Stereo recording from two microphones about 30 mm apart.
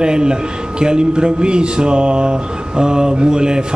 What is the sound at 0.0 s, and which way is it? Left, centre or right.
Speech, right.